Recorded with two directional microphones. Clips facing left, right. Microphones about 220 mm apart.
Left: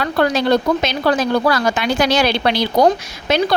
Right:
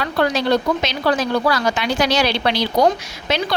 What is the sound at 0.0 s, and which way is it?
Speech, 50° left (ahead or behind).